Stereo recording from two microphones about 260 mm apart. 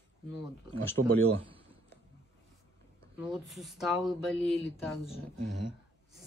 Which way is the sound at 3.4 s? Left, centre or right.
Centre.